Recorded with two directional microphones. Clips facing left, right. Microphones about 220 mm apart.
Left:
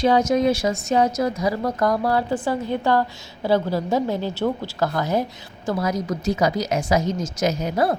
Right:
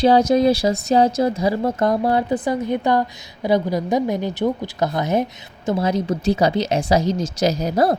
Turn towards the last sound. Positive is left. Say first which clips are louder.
# right 3 dB
turn(degrees=-40)  # may be behind; listen again after turning